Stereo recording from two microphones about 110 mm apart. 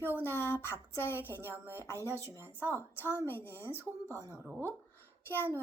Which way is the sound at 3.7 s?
30° right (ahead or behind).